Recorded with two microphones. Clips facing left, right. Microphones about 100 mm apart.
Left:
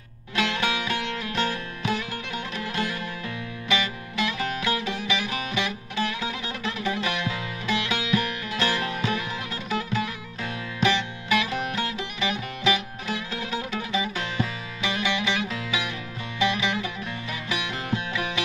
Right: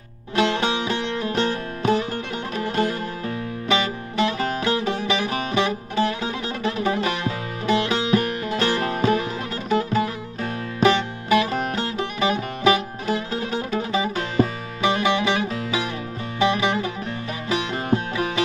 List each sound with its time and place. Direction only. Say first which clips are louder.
0.3 s music: right 5 dB; 30° right (ahead or behind)